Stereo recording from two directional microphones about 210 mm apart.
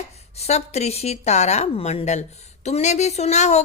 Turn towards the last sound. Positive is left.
turn(degrees=35)  # may be behind; listen again after turning